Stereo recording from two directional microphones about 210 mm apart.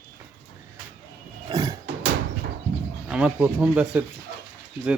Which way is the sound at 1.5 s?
20° right (ahead or behind).